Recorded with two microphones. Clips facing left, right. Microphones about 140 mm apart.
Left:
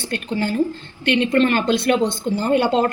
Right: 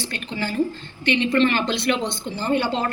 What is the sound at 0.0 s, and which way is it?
A woman's voice, 55° left (ahead or behind).